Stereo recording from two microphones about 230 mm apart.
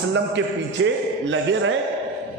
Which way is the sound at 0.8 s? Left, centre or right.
Right.